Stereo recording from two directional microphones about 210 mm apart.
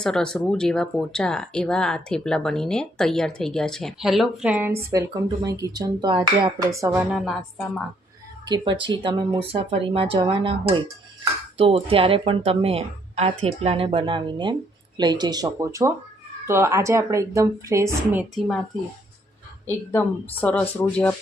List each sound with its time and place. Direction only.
0.0 s speech: 5° left (ahead or behind); by 7.0 s 15° right (ahead or behind)
7.1 s speech: centre (ahead or behind)
8.4 s a woman's voice: 20° right (ahead or behind); by 18.6 s centre (ahead or behind)
19.6 s speech: 10° left (ahead or behind)